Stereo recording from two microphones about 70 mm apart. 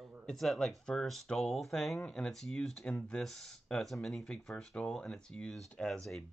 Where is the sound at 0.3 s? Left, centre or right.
Centre.